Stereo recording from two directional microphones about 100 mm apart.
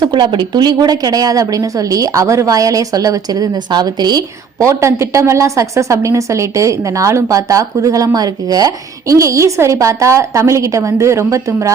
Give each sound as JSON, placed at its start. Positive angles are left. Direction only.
{"t": 0.0, "sound": "a woman's voice", "side_deg": -55}
{"t": 4.6, "sound": "a woman's voice", "side_deg": -30}